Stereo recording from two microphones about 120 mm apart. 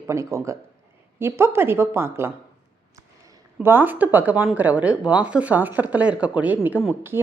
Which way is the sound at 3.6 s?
15° right (ahead or behind).